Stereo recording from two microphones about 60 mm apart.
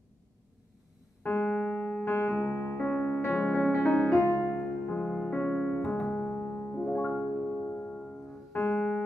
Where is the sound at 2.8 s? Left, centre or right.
Left.